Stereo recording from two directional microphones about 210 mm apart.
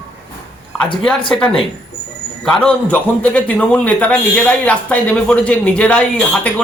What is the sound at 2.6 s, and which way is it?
A man's voice, 5° left (ahead or behind).